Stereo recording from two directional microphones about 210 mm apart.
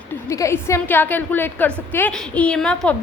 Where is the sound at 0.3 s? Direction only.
15° left (ahead or behind).